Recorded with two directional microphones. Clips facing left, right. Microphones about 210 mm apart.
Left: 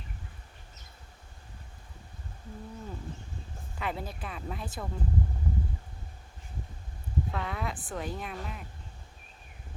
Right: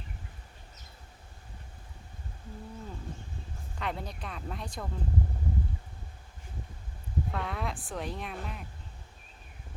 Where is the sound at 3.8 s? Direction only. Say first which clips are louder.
Left 1 dB; 5° left (ahead or behind).